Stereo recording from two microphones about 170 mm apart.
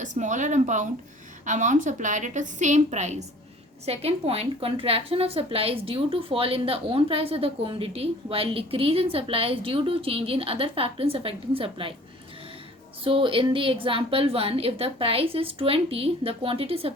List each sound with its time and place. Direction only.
0.0 s a woman's voice: 45° right (ahead or behind); by 11.9 s 30° right (ahead or behind)
13.1 s a woman's voice: 30° right (ahead or behind)